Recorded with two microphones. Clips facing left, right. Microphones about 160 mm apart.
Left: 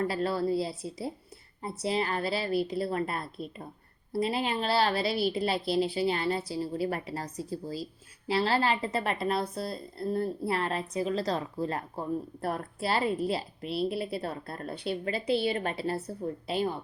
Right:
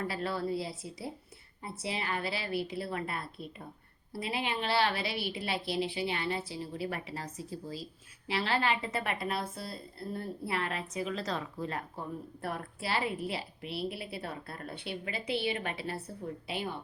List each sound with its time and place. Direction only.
0.0 s a woman's voice: 35° left (ahead or behind)